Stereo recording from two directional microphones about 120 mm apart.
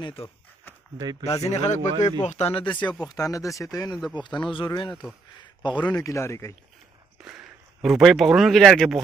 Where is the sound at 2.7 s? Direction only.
10° left (ahead or behind).